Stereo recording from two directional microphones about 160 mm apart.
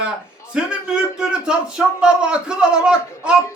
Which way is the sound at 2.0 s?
5° right (ahead or behind).